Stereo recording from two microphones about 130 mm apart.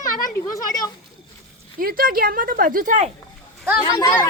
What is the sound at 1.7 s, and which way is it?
Speech, 90° right.